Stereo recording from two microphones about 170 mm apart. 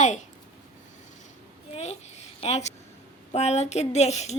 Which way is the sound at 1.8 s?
40° left (ahead or behind).